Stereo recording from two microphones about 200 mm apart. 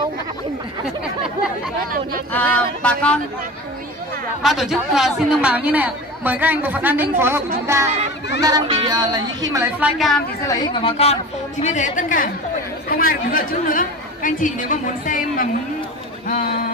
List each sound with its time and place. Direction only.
2.3 s a sound: 5° left (ahead or behind)
4.4 s a woman's voice: centre (ahead or behind)
10.4 s a woman's voice: 20° left (ahead or behind); by 15.4 s 40° left (ahead or behind)